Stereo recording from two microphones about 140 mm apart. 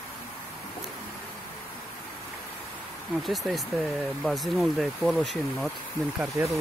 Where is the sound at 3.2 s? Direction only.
Centre (ahead or behind).